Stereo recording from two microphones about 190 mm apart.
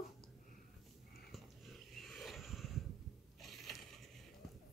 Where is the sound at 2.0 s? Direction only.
Centre (ahead or behind).